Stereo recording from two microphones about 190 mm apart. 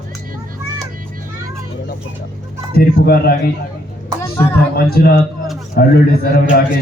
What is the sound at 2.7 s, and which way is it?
Speech, 55° left (ahead or behind).